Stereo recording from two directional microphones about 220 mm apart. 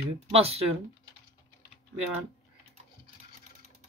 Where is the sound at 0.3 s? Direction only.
25° right (ahead or behind).